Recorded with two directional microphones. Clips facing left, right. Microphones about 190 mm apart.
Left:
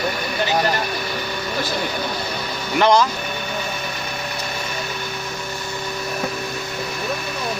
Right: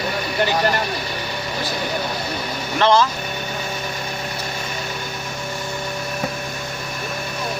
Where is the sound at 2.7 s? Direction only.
15° left (ahead or behind).